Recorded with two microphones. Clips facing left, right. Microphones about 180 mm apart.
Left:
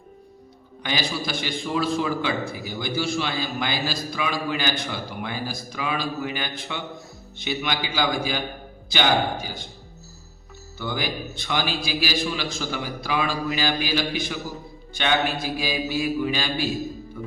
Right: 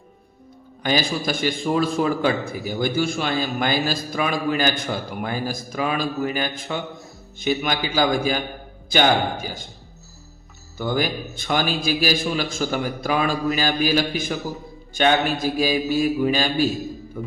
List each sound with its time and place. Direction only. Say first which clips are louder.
0.8 s a man's voice: right 5 dB; 45° right (ahead or behind)
10.8 s a man's voice: right 5 dB; 45° right (ahead or behind)